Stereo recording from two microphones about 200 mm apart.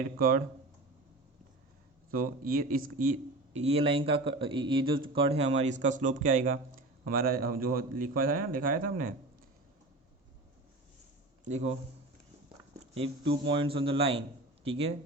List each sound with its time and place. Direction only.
0.2 s a man's voice: 45° right (ahead or behind)
2.0 s a man's voice: 45° right (ahead or behind)
11.4 s speech: 35° right (ahead or behind)
12.8 s a man's voice: 30° right (ahead or behind)